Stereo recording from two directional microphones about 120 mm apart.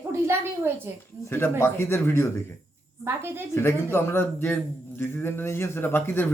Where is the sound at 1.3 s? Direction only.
20° left (ahead or behind).